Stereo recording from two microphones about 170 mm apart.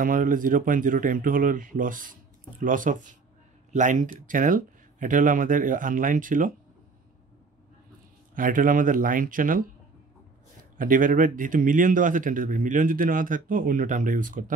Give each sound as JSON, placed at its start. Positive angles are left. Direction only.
{"t": 0.0, "sound": "speech", "side_deg": -55}
{"t": 8.4, "sound": "speech", "side_deg": -55}